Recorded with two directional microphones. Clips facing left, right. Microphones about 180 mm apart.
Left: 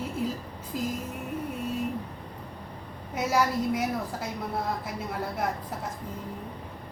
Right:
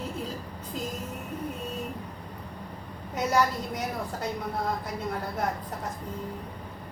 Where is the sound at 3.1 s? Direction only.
5° left (ahead or behind).